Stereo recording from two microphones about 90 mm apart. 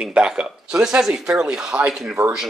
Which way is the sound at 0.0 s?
10° right (ahead or behind).